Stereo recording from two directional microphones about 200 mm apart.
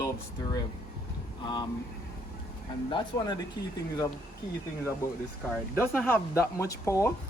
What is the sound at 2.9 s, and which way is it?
Speech, 20° left (ahead or behind).